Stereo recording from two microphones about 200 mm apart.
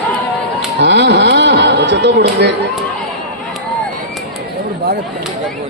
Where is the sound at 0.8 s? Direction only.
60° right (ahead or behind).